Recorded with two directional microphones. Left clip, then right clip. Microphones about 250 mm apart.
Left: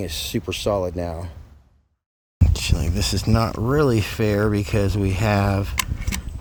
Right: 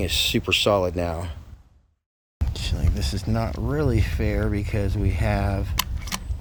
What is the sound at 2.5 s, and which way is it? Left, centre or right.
Speech, left.